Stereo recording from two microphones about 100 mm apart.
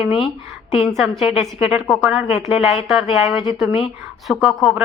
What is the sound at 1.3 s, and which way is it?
Speech, 90° left.